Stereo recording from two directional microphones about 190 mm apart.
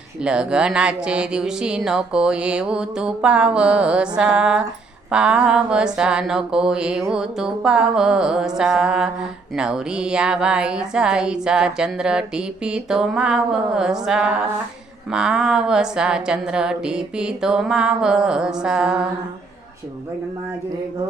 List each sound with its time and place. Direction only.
0.2 s a woman's voice: 5° right (ahead or behind)